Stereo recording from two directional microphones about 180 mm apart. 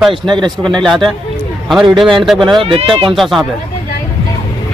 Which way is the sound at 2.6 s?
30° right (ahead or behind).